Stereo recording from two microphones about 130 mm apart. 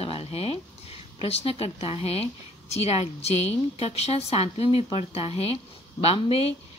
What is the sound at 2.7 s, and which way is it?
A woman's voice, 55° left (ahead or behind).